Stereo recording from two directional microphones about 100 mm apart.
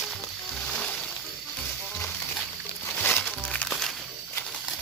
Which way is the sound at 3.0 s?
20° left (ahead or behind).